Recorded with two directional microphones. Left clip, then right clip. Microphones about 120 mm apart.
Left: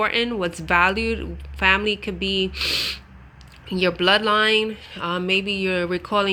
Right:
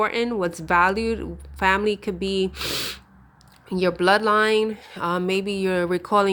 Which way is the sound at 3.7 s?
35° right (ahead or behind).